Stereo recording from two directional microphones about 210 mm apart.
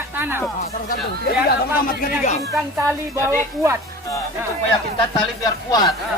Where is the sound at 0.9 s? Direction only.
45° left (ahead or behind).